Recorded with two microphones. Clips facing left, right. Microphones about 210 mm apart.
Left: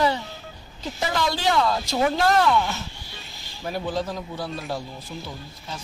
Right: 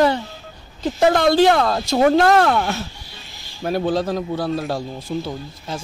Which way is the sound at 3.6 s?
80° right.